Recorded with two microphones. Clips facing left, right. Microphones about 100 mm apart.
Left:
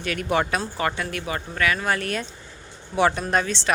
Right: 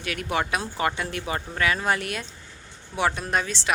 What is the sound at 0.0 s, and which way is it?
Speech, 5° right (ahead or behind).